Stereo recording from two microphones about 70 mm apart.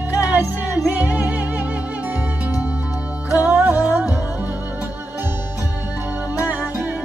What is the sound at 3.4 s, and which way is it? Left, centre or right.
Music, right.